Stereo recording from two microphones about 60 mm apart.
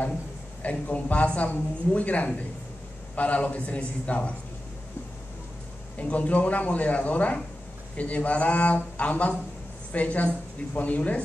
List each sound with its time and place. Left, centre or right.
0.6 s speech: left
5.9 s speech: left